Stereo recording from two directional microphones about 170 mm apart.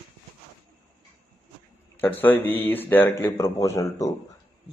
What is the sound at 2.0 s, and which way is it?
Speech, 10° left (ahead or behind).